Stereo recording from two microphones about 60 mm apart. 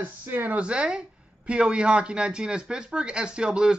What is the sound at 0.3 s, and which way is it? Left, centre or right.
Speech, right.